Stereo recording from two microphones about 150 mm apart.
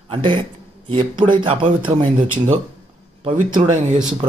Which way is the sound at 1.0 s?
35° right (ahead or behind).